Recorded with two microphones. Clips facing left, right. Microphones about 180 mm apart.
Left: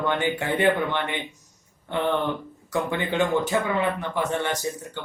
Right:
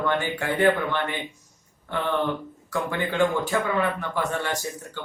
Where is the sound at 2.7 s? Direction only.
20° left (ahead or behind).